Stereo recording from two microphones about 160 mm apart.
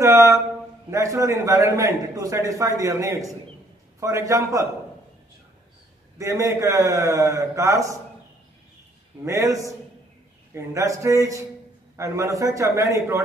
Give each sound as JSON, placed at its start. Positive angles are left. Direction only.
{"t": 0.0, "sound": "a man's voice", "side_deg": -20}
{"t": 6.1, "sound": "a man's voice", "side_deg": -20}
{"t": 9.2, "sound": "a man's voice", "side_deg": -15}